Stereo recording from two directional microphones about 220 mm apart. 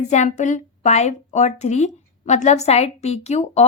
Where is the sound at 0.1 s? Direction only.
30° left (ahead or behind).